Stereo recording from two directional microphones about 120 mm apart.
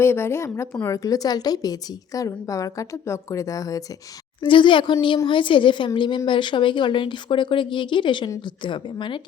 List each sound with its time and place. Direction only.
0.0 s a woman's voice: 20° left (ahead or behind)
4.4 s a woman's voice: 45° left (ahead or behind)